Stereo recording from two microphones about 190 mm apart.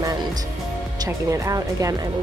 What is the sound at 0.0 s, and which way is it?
Music, 20° right (ahead or behind).